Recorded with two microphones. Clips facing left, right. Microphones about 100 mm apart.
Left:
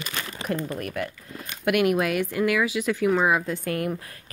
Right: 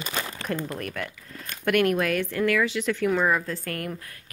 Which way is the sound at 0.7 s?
5° left (ahead or behind).